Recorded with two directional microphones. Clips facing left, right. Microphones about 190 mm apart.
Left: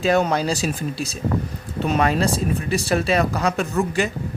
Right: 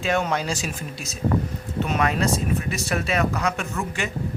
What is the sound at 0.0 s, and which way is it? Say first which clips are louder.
Speech: left 5 dB; 35° left (ahead or behind).